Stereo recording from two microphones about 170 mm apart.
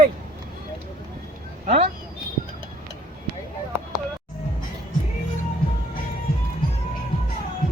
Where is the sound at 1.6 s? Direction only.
45° right (ahead or behind).